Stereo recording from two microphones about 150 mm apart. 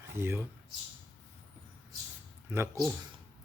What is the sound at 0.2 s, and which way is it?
Speech, 15° right (ahead or behind).